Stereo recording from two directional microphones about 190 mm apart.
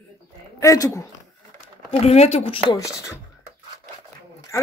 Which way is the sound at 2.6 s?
15° left (ahead or behind).